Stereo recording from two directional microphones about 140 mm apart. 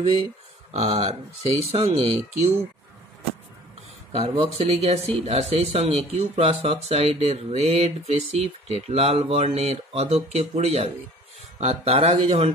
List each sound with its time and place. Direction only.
0.7 s speech: 45° right (ahead or behind)
4.1 s speech: 45° right (ahead or behind)